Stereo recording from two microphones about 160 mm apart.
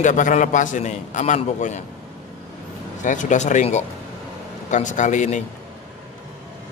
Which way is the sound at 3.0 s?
50° left (ahead or behind).